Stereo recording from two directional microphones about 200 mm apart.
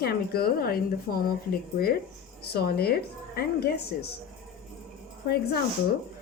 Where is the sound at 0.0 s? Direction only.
50° left (ahead or behind).